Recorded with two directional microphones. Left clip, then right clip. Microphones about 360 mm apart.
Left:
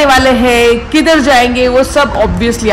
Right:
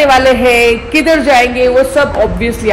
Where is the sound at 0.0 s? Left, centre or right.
Centre.